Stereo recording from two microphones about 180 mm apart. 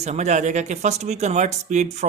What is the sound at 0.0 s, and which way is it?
Speech, 40° right (ahead or behind).